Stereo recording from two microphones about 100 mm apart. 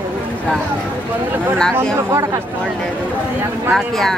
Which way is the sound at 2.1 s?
30° right (ahead or behind).